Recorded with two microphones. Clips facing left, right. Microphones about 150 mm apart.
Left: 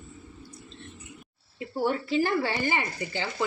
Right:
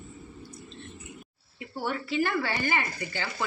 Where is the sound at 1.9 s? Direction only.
30° left (ahead or behind).